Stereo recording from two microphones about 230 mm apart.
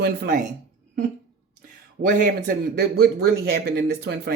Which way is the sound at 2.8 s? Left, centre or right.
Right.